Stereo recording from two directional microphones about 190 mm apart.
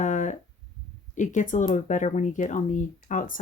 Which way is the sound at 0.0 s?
40° left (ahead or behind).